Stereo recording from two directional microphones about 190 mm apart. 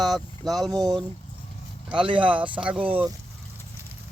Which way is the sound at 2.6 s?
5° right (ahead or behind).